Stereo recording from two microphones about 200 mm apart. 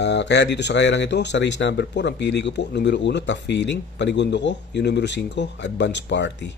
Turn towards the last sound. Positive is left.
turn(degrees=60)  # may be behind; listen again after turning